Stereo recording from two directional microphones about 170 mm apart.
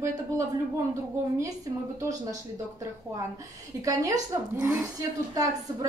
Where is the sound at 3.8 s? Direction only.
20° right (ahead or behind).